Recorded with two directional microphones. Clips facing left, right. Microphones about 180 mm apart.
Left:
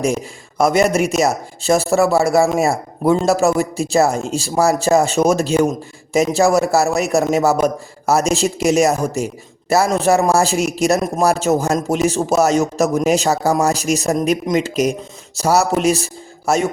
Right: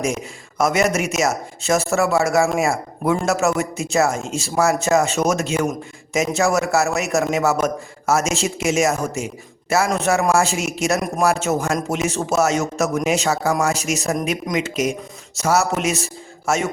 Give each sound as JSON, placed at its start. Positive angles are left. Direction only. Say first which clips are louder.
{"t": 0.0, "sound": "speech", "louder": "left 4 dB", "side_deg": 35}